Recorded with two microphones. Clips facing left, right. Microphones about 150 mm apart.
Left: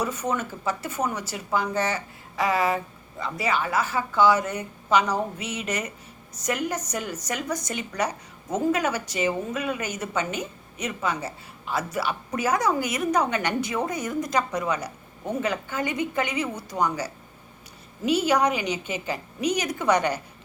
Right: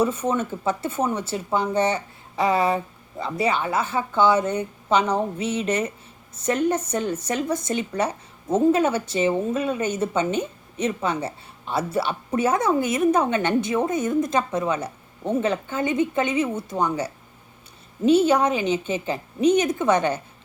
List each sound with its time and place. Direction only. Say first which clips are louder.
0.0 s a woman's voice: right 5 dB; 25° right (ahead or behind)